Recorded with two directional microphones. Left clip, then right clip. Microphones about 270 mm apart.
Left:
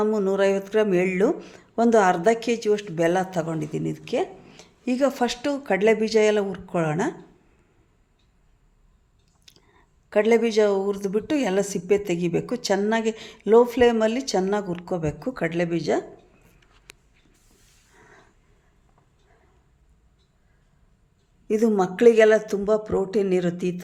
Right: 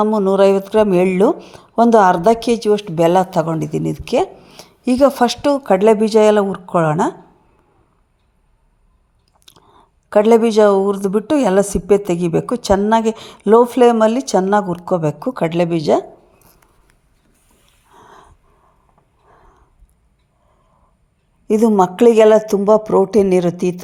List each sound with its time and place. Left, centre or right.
0.0 s a woman's voice: centre
9.5 s a woman's voice: centre
21.4 s a woman's voice: centre